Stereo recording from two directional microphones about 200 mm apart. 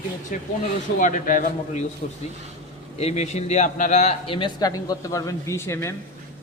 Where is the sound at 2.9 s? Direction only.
30° left (ahead or behind); by 5.9 s 15° left (ahead or behind).